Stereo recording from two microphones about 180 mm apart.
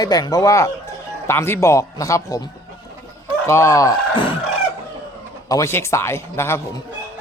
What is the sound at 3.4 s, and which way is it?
Speech, 15° left (ahead or behind).